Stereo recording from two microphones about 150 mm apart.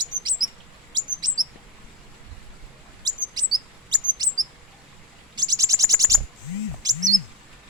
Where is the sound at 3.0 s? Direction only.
30° right (ahead or behind).